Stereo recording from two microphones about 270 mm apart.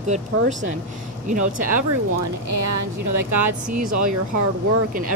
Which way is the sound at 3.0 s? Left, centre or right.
Right.